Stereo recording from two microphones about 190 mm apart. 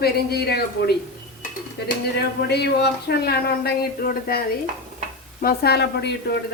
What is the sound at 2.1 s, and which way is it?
Speech, 60° left (ahead or behind).